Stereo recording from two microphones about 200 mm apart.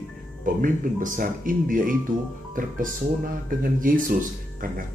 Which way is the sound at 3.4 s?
45° right (ahead or behind).